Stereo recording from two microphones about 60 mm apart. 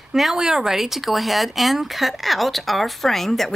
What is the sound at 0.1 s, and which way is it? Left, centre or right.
Speech, centre.